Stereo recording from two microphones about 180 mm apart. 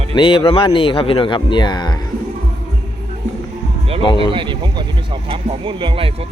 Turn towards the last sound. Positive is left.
turn(degrees=-30)  # may be behind; listen again after turning